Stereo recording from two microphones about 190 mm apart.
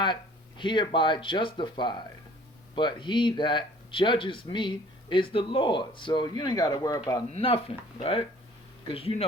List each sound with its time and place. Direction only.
0.0 s speech: 25° left (ahead or behind)
7.3 s speech: 30° left (ahead or behind)
8.9 s speech: 30° left (ahead or behind)